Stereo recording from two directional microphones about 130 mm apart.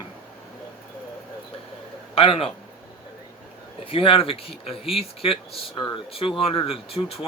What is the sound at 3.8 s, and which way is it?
Speech, 45° left (ahead or behind).